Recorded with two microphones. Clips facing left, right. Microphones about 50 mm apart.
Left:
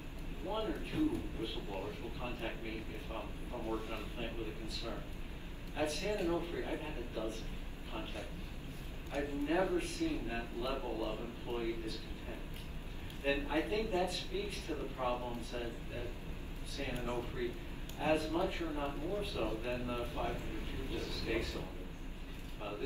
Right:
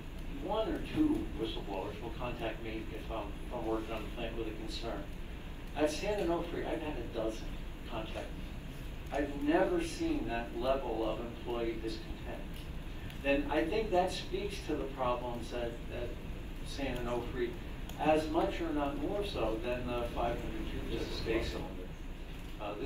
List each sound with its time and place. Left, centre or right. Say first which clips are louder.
0.5 s a man's voice: right 4 dB; right
13.2 s a woman's voice: right 4 dB; right